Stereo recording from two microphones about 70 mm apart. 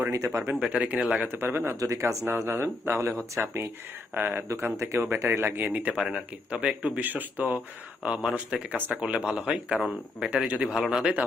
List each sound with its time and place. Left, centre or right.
0.6 s speech: centre
1.3 s speech: right
1.7 s speech: right
4.1 s speech: right
4.8 s speech: right
5.6 s speech: centre
6.0 s speech: centre
7.0 s speech: right
8.0 s speech: centre